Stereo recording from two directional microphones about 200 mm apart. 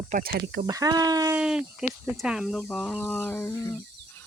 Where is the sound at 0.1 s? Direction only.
50° right (ahead or behind).